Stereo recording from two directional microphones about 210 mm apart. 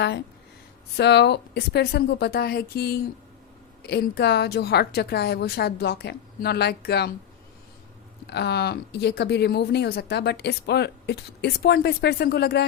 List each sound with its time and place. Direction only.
0.9 s speech: 55° left (ahead or behind)
8.3 s speech: 50° left (ahead or behind)